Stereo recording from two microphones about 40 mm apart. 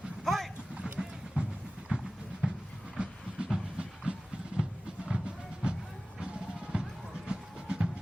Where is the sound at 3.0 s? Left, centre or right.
Right.